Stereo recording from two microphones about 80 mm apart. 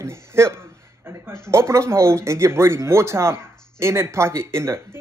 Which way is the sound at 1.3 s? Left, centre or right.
Right.